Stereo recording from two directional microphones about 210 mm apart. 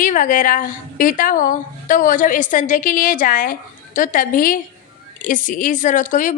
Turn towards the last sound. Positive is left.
turn(degrees=40)  # may be behind; listen again after turning